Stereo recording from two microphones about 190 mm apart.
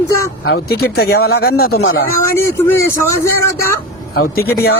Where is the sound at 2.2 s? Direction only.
15° left (ahead or behind).